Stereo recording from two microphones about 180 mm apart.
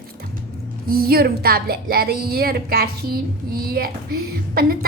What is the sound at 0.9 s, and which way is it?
A woman's voice, 55° right (ahead or behind).